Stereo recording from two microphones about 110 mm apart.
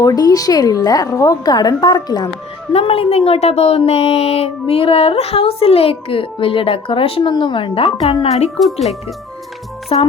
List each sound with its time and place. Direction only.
0.0 s a woman's voice: 35° left (ahead or behind)
2.7 s speech: 60° left (ahead or behind)
7.2 s speech: 45° left (ahead or behind); by 8.4 s 75° left (ahead or behind)
8.4 s speech: centre (ahead or behind)
9.9 s speech: 55° left (ahead or behind)